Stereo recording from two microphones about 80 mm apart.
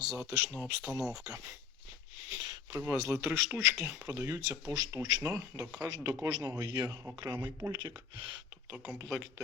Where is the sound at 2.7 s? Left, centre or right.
Right.